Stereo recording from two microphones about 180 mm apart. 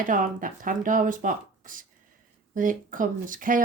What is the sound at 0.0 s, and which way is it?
Speech, 50° right (ahead or behind).